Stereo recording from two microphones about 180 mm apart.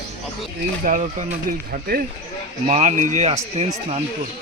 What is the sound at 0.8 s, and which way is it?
Speech, 50° right (ahead or behind).